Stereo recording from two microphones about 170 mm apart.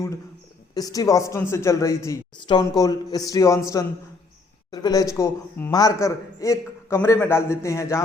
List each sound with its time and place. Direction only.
0.7 s a woman's voice: 20° left (ahead or behind)